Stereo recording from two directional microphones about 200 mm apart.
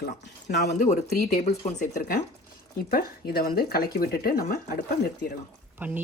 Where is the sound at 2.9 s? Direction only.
50° left (ahead or behind).